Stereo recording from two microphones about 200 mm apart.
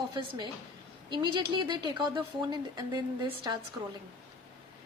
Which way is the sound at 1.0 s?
25° right (ahead or behind).